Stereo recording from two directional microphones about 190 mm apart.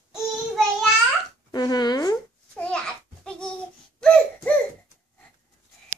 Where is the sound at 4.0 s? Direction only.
5° left (ahead or behind).